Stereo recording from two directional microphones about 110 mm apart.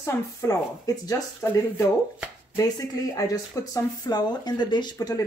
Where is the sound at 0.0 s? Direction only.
30° left (ahead or behind).